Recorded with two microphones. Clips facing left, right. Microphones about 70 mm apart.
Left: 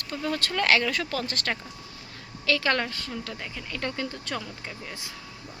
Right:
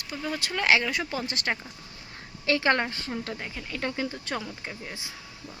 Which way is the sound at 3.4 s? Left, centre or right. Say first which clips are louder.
Even; centre.